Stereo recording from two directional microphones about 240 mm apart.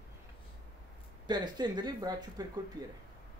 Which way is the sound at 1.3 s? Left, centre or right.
Centre.